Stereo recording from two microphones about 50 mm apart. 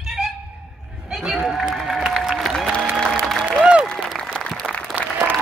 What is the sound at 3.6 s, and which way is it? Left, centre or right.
Applause, right.